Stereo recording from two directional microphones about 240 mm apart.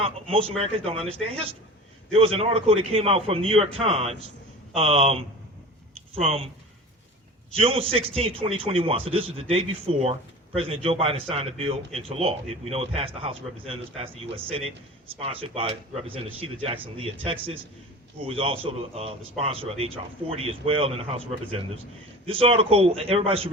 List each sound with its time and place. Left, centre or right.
0.0 s a man's voice: right
2.1 s a man's voice: right
7.6 s a man's voice: right
22.3 s a man's voice: right